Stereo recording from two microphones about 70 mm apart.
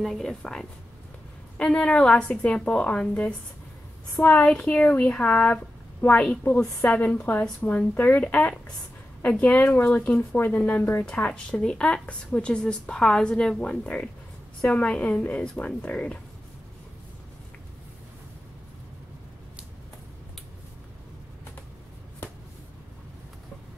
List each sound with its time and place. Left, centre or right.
0.0 s speech: centre
4.5 s speech: centre
11.1 s speech: centre